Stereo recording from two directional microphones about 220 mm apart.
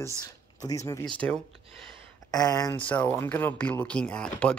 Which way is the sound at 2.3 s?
15° left (ahead or behind).